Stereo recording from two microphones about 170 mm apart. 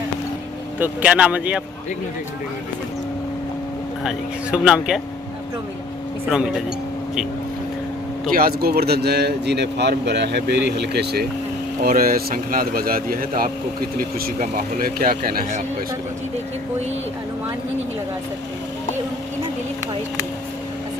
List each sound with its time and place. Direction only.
0.8 s speech: 10° right (ahead or behind)
4.5 s speech: 5° right (ahead or behind)
8.3 s speech: 60° right (ahead or behind)
11.8 s speech: 60° right (ahead or behind)